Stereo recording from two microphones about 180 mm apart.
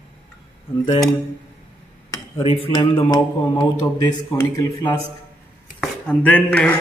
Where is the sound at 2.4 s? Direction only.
30° left (ahead or behind).